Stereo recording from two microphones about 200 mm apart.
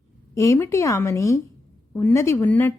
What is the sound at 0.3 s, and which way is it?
A woman's voice, 15° left (ahead or behind).